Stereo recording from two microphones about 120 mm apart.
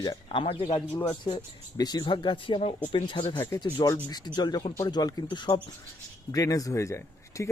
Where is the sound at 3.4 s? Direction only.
25° left (ahead or behind).